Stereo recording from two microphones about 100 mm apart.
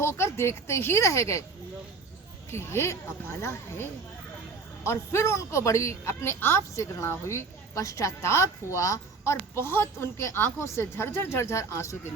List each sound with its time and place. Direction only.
0.0 s a woman's voice: 25° left (ahead or behind)
2.5 s a woman's voice: 25° left (ahead or behind)